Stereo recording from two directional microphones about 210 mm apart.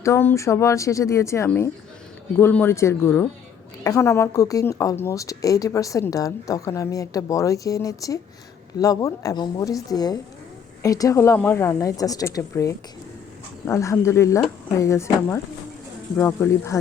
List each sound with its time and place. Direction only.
0.0 s a woman's voice: 10° left (ahead or behind)